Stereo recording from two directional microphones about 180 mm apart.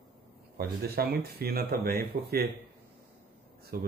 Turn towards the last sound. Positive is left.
turn(degrees=-55)  # may be behind; listen again after turning